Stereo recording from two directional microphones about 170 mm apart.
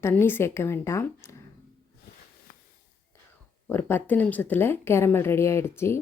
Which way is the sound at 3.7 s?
10° left (ahead or behind).